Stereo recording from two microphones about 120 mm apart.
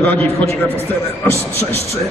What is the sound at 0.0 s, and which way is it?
A man's voice, 15° left (ahead or behind).